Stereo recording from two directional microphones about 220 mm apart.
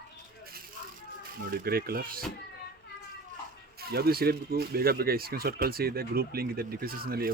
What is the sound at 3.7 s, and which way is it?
Speech, 45° right (ahead or behind).